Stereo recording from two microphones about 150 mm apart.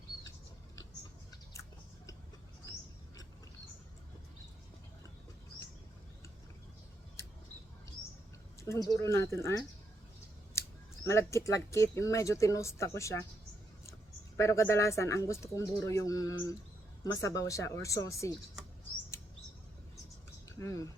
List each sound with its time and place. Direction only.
8.6 s speech: 20° left (ahead or behind)
11.0 s speech: 20° left (ahead or behind)
14.3 s speech: 20° left (ahead or behind)
20.6 s speech: 20° left (ahead or behind)